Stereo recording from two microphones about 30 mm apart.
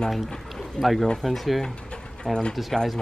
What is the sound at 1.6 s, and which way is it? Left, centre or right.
Pigeon, left.